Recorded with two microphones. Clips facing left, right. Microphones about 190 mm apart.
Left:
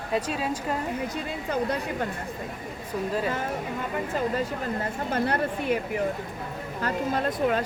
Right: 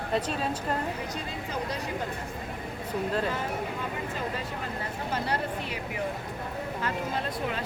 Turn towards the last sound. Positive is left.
turn(degrees=45)  # may be behind; listen again after turning